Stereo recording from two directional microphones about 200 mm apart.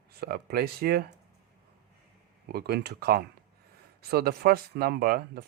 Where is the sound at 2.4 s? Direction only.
50° right (ahead or behind).